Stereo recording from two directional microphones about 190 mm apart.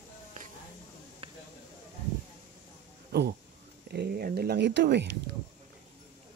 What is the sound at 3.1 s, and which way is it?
Speech, 60° right (ahead or behind).